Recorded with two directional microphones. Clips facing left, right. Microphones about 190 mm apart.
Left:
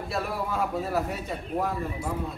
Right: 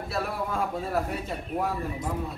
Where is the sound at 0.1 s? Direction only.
Centre (ahead or behind).